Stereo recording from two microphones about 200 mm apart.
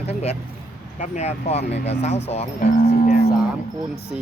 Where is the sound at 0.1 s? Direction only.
30° left (ahead or behind).